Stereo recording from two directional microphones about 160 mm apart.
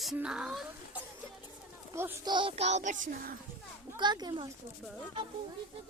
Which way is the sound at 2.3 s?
35° right (ahead or behind).